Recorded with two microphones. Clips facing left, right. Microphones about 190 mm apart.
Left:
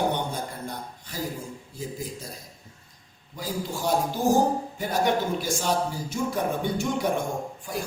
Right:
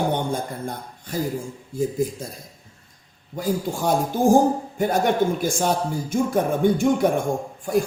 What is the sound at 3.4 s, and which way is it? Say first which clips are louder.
Speech: right 6 dB; 50° right (ahead or behind).